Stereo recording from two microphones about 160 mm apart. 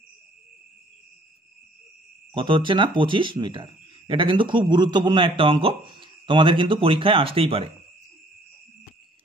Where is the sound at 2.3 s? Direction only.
30° right (ahead or behind).